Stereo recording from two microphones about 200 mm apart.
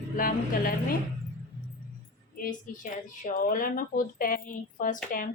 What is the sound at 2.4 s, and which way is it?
Speech, 40° left (ahead or behind).